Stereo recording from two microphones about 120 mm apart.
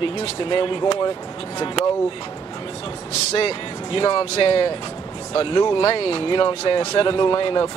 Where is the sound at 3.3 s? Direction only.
50° left (ahead or behind).